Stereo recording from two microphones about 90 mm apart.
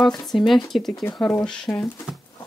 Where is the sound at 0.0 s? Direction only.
5° left (ahead or behind).